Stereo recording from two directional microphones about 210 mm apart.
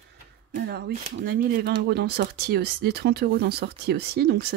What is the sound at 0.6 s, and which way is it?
Speech, 50° right (ahead or behind).